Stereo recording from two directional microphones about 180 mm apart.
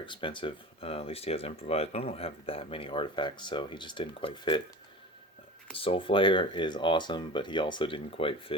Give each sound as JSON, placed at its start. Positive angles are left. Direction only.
{"t": 0.0, "sound": "speech", "side_deg": 25}
{"t": 5.7, "sound": "speech", "side_deg": 30}